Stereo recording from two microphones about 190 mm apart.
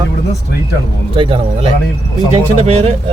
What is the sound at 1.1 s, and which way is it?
Speech, 25° right (ahead or behind).